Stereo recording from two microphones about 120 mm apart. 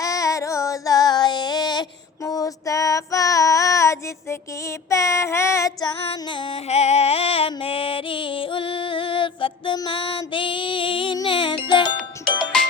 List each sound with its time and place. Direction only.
0.0 s child singing: 30° left (ahead or behind)
6.1 s music: 45° left (ahead or behind)
6.7 s music: 65° left (ahead or behind); by 9.7 s 45° left (ahead or behind)
10.3 s female singing: 45° left (ahead or behind)
11.3 s music: 45° left (ahead or behind)